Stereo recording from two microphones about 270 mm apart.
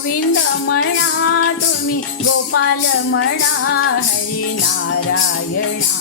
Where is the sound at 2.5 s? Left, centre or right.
Left.